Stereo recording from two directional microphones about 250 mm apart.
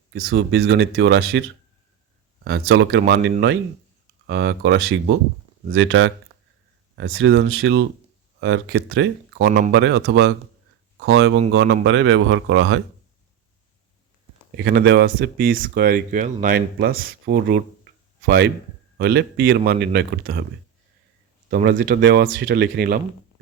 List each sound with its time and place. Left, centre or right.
0.1 s speech: right
2.6 s speech: right
14.5 s speech: right
21.5 s speech: right